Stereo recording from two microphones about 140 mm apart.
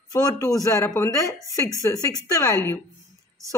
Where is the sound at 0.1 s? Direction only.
25° left (ahead or behind).